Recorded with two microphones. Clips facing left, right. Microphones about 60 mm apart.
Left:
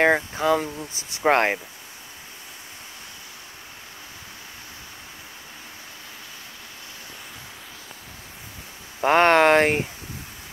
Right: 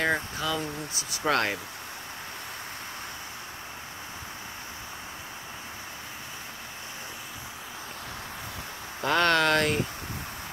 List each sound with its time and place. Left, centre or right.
0.0 s speech: left
9.0 s speech: left